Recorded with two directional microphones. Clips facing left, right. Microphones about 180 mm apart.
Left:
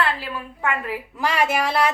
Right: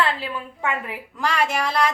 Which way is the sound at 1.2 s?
10° left (ahead or behind).